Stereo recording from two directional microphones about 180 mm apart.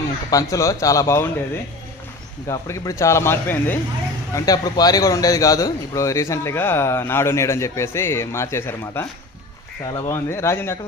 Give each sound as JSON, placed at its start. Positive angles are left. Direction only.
{"t": 0.3, "sound": "a man's voice", "side_deg": 20}
{"t": 2.5, "sound": "a man's voice", "side_deg": 15}